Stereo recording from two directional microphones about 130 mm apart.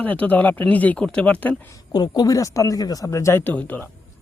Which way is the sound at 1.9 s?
30° left (ahead or behind).